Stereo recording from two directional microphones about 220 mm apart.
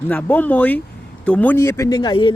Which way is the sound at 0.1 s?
5° left (ahead or behind).